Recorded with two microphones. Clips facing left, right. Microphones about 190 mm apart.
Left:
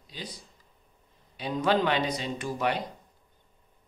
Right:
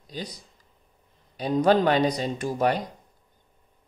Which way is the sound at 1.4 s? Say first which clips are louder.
Right 5 dB; 40° right (ahead or behind).